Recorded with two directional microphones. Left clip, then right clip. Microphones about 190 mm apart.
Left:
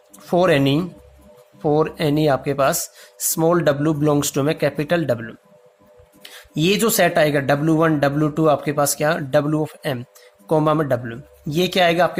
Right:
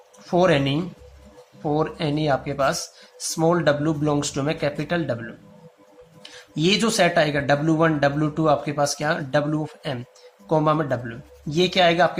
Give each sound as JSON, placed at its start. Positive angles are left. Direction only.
{"t": 0.3, "sound": "speech", "side_deg": 45}